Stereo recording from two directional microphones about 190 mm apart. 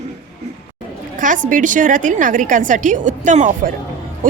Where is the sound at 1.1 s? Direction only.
45° right (ahead or behind).